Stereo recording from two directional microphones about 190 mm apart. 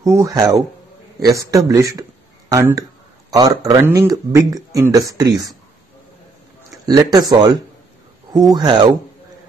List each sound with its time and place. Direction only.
0.0 s speech: 15° right (ahead or behind)
6.9 s speech: 20° right (ahead or behind)